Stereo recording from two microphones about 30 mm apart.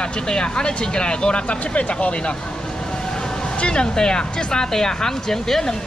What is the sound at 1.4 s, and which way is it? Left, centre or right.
Speech, left.